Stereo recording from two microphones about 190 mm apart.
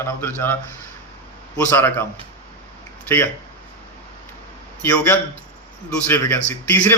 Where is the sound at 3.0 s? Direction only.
10° left (ahead or behind).